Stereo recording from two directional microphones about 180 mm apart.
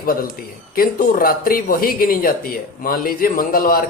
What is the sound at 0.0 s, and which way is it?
Speech, 55° left (ahead or behind).